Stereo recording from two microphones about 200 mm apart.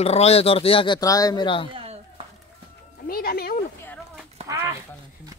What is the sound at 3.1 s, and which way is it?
Speech, 50° left (ahead or behind).